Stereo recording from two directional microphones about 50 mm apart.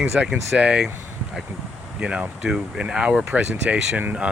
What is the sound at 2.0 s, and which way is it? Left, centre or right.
Speech, centre.